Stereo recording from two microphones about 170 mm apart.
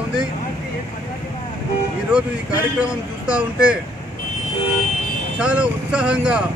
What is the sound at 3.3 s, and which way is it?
Speech, 5° right (ahead or behind).